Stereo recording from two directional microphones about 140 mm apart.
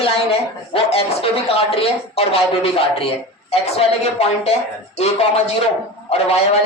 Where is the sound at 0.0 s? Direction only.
45° left (ahead or behind).